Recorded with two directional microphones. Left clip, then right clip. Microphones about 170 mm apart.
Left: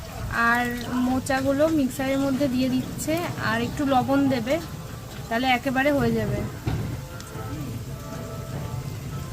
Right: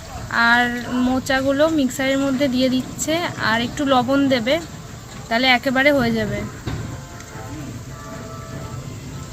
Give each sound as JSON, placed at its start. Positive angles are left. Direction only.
{"t": 0.3, "sound": "speech", "side_deg": -25}